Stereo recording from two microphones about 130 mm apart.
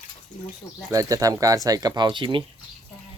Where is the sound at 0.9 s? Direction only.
25° right (ahead or behind).